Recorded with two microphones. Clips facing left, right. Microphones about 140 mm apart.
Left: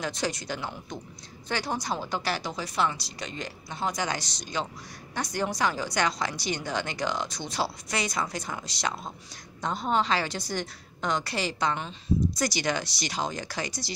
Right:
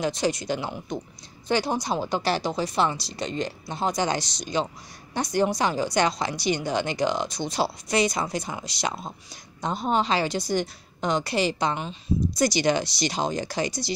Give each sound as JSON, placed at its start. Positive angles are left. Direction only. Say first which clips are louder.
{"t": 0.0, "sound": "a woman's voice", "louder": "right 6 dB", "side_deg": -15}